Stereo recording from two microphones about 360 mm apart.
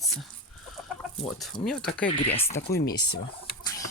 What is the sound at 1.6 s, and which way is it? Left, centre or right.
Speech, centre.